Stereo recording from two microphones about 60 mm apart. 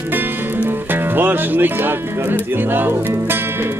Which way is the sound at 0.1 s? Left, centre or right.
Right.